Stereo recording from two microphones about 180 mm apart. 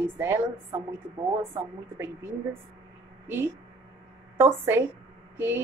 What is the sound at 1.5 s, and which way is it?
Speech, 15° right (ahead or behind).